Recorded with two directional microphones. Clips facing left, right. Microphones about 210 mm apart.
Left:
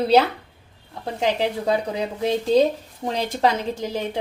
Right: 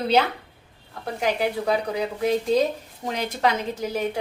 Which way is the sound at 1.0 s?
25° left (ahead or behind).